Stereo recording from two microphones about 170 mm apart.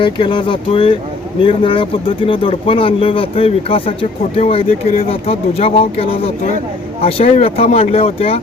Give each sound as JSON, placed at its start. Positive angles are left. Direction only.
{"t": 0.0, "sound": "speech", "side_deg": 30}